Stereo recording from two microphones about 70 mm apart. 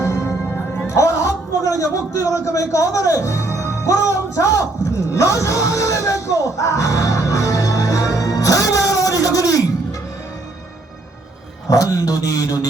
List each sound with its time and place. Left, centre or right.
0.0 s music: left
0.9 s a sound: left
11.7 s a man's voice: left